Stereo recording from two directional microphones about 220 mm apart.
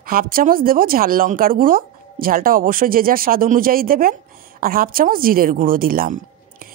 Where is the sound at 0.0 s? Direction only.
40° right (ahead or behind).